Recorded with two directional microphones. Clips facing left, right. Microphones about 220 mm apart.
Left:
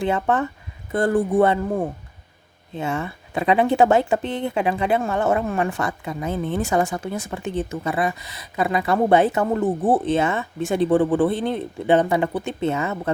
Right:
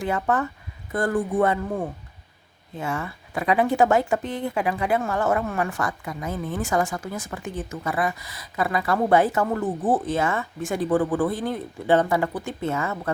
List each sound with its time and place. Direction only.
0.0 s speech: 25° left (ahead or behind)